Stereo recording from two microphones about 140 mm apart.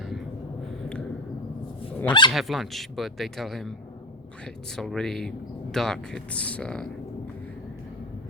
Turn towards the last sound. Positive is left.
turn(degrees=5)  # may be behind; listen again after turning